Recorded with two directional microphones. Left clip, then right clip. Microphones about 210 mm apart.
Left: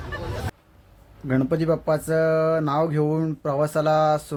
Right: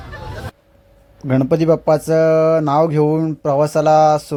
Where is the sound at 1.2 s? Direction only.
30° right (ahead or behind).